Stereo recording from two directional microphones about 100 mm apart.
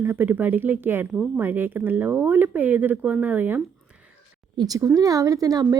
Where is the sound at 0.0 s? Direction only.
20° right (ahead or behind).